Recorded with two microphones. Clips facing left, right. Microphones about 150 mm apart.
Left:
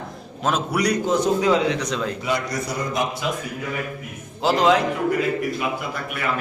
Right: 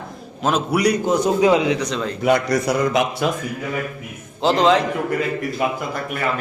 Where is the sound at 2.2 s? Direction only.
60° right (ahead or behind).